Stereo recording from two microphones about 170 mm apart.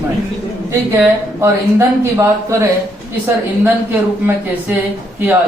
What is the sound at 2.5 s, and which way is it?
Speech, 15° right (ahead or behind).